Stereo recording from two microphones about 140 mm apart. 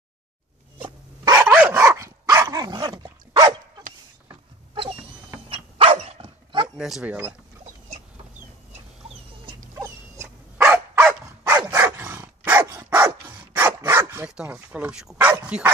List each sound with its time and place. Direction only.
0.7 s dog: 35° right (ahead or behind)
1.3 s dog: 15° right (ahead or behind); by 3.5 s 30° right (ahead or behind)
5.5 s dog: 40° right (ahead or behind)
6.8 s speech: 5° right (ahead or behind)
9.8 s dog: 20° right (ahead or behind)
14.2 s dog: 5° right (ahead or behind)
14.5 s speech: 10° right (ahead or behind)